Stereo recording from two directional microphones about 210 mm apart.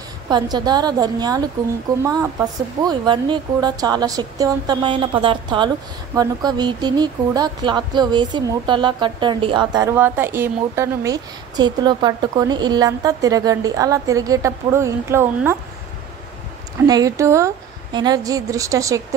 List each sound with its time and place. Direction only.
0.3 s speech: 20° right (ahead or behind)
2.8 s speech: 20° right (ahead or behind)
16.8 s a woman's voice: 15° right (ahead or behind)